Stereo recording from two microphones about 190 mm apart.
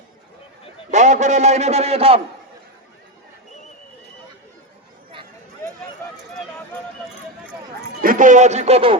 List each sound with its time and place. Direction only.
0.9 s a man's voice: 40° right (ahead or behind)
8.0 s speech: 45° right (ahead or behind)